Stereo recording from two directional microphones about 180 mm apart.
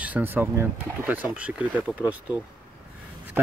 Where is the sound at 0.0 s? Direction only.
10° right (ahead or behind).